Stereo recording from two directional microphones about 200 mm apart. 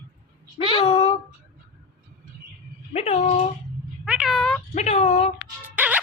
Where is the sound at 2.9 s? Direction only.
35° left (ahead or behind).